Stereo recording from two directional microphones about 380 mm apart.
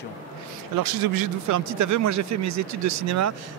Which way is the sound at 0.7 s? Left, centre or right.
Right.